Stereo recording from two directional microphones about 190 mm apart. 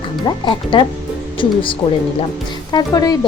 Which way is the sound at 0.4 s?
25° left (ahead or behind).